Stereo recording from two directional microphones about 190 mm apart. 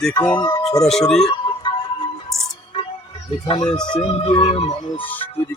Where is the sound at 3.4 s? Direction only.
25° left (ahead or behind).